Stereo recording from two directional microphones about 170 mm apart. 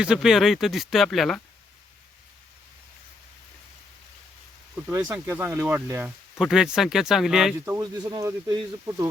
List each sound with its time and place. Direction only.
0.0 s speech: 5° right (ahead or behind)
4.9 s speech: 15° right (ahead or behind)
7.6 s speech: 20° right (ahead or behind)